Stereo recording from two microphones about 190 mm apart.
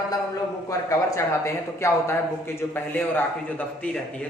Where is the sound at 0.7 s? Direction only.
15° left (ahead or behind).